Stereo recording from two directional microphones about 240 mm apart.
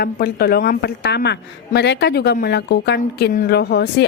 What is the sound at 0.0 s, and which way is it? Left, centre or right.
A woman's voice, left.